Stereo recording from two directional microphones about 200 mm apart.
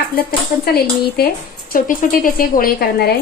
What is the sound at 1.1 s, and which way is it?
Speech, 50° left (ahead or behind).